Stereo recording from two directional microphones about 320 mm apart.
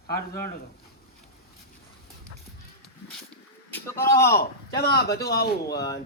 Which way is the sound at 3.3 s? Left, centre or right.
Centre.